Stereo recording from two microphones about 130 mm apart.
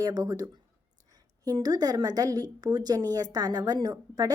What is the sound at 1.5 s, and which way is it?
A woman's voice, 30° right (ahead or behind).